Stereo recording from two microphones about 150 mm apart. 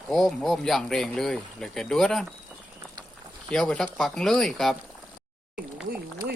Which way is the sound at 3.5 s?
5° left (ahead or behind).